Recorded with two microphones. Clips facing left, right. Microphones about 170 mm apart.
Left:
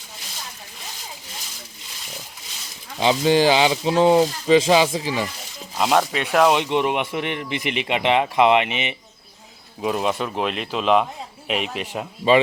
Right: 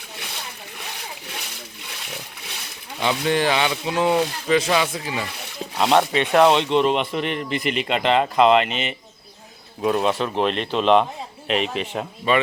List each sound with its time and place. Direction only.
0.2 s a sound: 65° right (ahead or behind)
3.2 s speech: 30° left (ahead or behind)
5.7 s speech: centre (ahead or behind)